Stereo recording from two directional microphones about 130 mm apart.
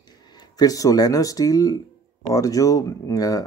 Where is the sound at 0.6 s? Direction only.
25° left (ahead or behind).